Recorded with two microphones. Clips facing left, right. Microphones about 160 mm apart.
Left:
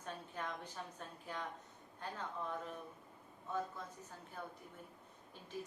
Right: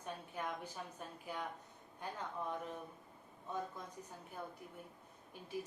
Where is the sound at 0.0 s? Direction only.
10° right (ahead or behind).